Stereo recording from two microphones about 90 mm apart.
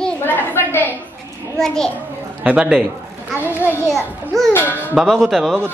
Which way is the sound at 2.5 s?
15° right (ahead or behind).